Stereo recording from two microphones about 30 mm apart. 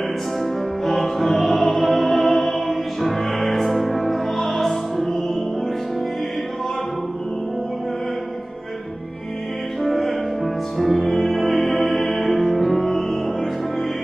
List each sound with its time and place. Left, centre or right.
0.4 s music: centre
9.8 s music: centre